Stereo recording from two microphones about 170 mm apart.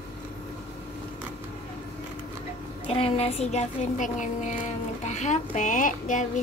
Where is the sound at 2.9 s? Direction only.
35° left (ahead or behind).